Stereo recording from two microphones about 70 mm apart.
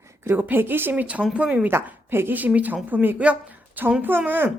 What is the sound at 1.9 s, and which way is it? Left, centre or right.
A woman's voice, right.